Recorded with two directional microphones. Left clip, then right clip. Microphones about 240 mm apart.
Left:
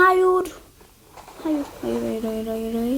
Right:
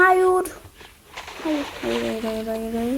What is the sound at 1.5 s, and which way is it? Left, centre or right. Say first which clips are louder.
Speech: right 1 dB; right.